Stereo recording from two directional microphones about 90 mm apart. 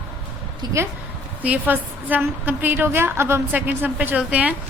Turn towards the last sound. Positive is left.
turn(degrees=-15)  # may be behind; listen again after turning